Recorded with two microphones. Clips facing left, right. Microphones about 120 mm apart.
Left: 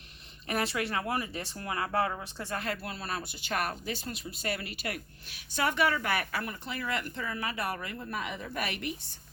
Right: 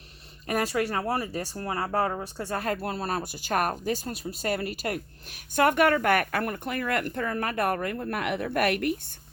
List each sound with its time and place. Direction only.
0.4 s speech: 40° right (ahead or behind)